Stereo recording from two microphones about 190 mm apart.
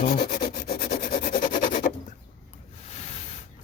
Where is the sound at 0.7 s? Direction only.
50° left (ahead or behind).